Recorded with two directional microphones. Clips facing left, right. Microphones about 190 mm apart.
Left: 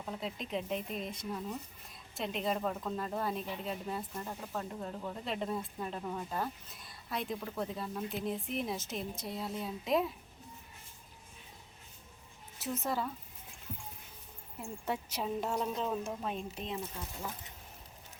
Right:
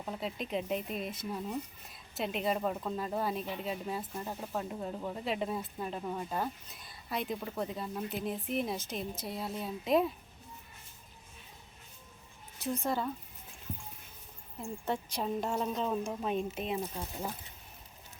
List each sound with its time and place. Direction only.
0.2 s speech: 5° right (ahead or behind)
12.5 s speech: 5° left (ahead or behind)
14.8 s speech: 5° left (ahead or behind)
16.8 s speech: 35° right (ahead or behind)